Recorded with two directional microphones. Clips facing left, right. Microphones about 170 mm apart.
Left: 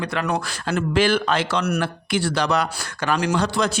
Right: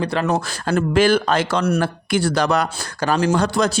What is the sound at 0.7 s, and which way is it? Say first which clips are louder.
Speech: right 4 dB; 45° right (ahead or behind).